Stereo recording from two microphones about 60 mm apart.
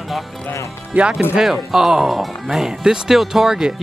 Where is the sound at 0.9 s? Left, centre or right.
Right.